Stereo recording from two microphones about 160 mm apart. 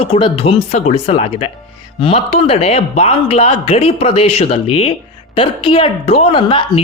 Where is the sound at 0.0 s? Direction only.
35° left (ahead or behind).